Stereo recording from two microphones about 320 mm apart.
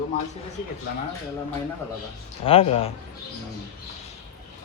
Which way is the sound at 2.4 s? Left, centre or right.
Centre.